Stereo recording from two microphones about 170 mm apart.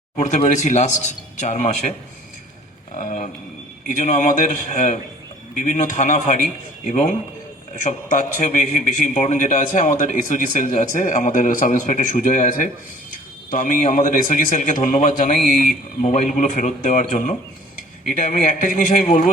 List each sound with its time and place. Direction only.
0.2 s a man's voice: 45° left (ahead or behind)
2.9 s a man's voice: 45° left (ahead or behind)
8.4 s a man's voice: 45° left (ahead or behind)